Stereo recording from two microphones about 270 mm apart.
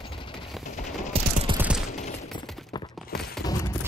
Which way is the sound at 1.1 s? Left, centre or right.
Right.